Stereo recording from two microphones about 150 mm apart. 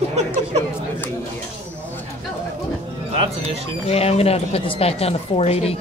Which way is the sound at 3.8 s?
45° left (ahead or behind).